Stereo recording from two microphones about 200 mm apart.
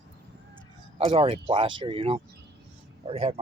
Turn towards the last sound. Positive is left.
turn(degrees=-30)  # may be behind; listen again after turning